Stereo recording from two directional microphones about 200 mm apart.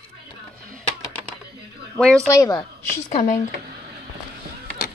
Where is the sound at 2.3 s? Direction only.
20° left (ahead or behind).